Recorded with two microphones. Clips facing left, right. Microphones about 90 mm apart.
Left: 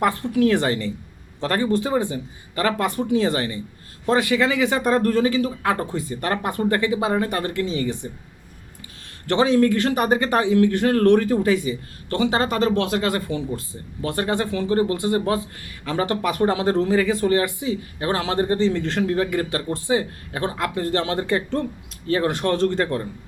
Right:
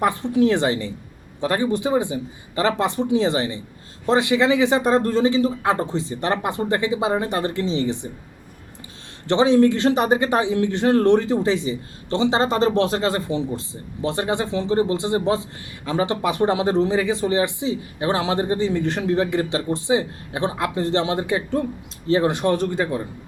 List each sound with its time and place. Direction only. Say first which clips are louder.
0.0 s a man's voice: right 1 dB; 20° right (ahead or behind)
9.2 s a man's voice: right 2 dB; 20° right (ahead or behind)